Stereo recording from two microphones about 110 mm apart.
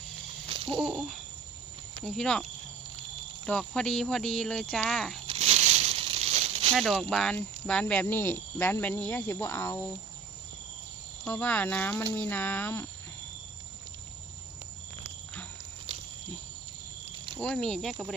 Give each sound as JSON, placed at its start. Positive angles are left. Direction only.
{"t": 0.5, "sound": "a sound", "side_deg": -55}
{"t": 0.8, "sound": "speech", "side_deg": 0}
{"t": 2.0, "sound": "speech", "side_deg": 5}
{"t": 5.3, "sound": "a sound", "side_deg": -90}
{"t": 6.7, "sound": "speech", "side_deg": 0}
{"t": 8.0, "sound": "cricket", "side_deg": 20}
{"t": 11.3, "sound": "speech", "side_deg": 15}
{"t": 15.9, "sound": "a sound", "side_deg": -65}
{"t": 17.4, "sound": "speech", "side_deg": 5}